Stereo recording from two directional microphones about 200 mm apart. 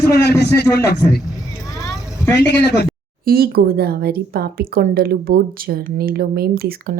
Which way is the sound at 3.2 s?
50° right (ahead or behind).